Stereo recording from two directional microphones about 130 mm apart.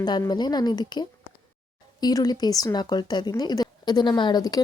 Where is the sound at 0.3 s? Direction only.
35° left (ahead or behind).